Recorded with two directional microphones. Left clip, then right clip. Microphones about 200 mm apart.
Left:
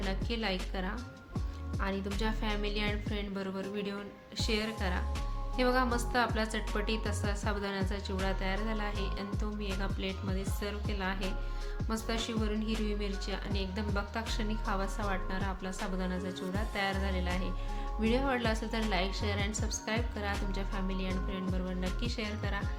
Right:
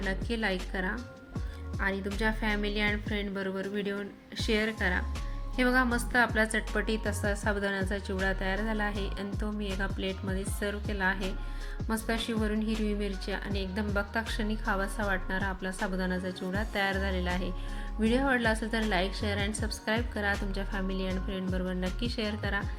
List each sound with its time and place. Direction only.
0.1 s a woman's voice: 15° right (ahead or behind)